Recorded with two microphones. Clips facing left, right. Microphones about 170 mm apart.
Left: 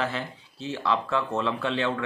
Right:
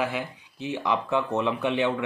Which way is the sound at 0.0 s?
15° right (ahead or behind).